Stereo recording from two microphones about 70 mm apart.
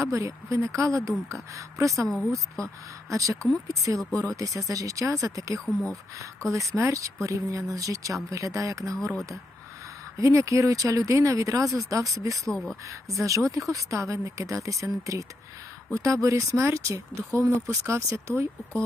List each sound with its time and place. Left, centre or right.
0.0 s speech: right
2.0 s speech: centre
3.1 s speech: right
5.5 s speech: centre
6.5 s speech: right
10.2 s speech: right
12.5 s speech: centre
13.2 s speech: right